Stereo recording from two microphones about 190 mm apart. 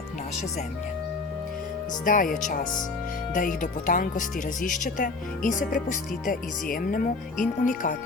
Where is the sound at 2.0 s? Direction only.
45° left (ahead or behind).